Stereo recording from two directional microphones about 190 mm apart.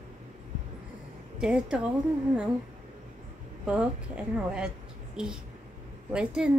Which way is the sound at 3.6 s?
5° right (ahead or behind).